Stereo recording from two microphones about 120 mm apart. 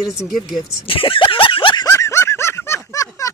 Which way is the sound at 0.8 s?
50° left (ahead or behind).